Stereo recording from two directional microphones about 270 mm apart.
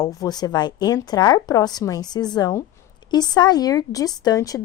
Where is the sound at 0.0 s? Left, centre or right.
Centre.